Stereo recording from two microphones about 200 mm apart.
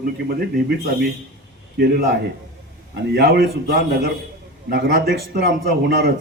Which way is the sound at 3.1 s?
55° right (ahead or behind).